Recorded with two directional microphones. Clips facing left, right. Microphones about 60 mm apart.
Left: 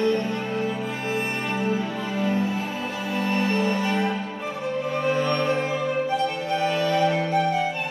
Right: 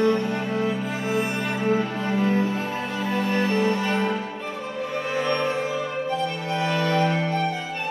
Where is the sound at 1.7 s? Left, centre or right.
Right.